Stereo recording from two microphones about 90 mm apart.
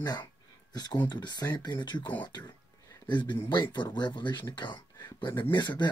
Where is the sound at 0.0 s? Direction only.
50° left (ahead or behind).